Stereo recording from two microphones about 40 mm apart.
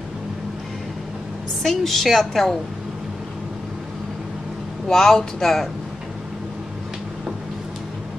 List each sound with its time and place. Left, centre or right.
1.6 s a woman's voice: centre
4.8 s speech: centre